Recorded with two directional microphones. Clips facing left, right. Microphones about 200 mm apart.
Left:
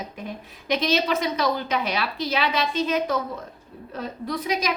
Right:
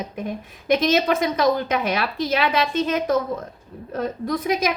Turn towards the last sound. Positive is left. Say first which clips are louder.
# right 4 dB
turn(degrees=-50)  # may be behind; listen again after turning